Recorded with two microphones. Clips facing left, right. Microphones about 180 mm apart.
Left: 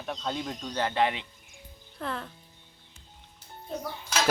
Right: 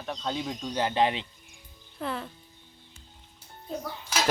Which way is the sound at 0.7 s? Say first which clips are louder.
Right 1 dB; 15° right (ahead or behind).